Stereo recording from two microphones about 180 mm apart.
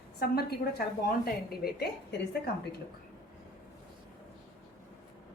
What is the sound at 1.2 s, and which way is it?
Speech, 60° left (ahead or behind).